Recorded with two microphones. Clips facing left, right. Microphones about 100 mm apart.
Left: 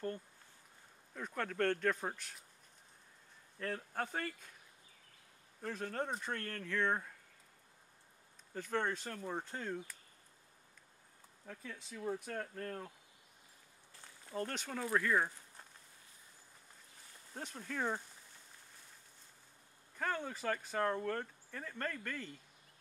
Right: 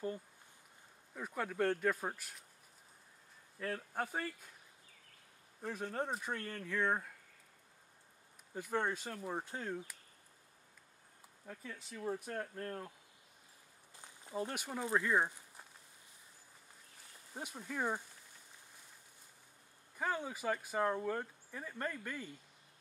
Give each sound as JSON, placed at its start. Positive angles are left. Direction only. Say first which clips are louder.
{"t": 1.1, "sound": "speech", "louder": "even", "side_deg": -10}
{"t": 3.5, "sound": "speech", "louder": "even", "side_deg": -5}
{"t": 5.6, "sound": "speech", "louder": "even", "side_deg": -5}
{"t": 8.5, "sound": "speech", "louder": "even", "side_deg": -10}
{"t": 11.7, "sound": "speech", "louder": "even", "side_deg": -5}
{"t": 13.9, "sound": "speech", "louder": "right 1 dB", "side_deg": -20}
{"t": 17.3, "sound": "speech", "louder": "even", "side_deg": -10}
{"t": 20.0, "sound": "speech", "louder": "right 1 dB", "side_deg": -10}